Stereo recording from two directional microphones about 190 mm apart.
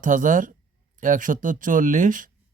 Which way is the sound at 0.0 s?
45° right (ahead or behind).